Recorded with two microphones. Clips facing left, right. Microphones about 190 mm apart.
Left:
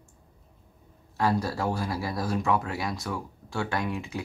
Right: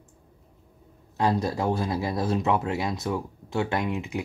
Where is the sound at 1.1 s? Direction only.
20° right (ahead or behind).